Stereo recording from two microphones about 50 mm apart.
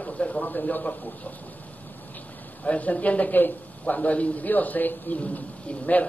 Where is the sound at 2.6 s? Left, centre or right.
Left.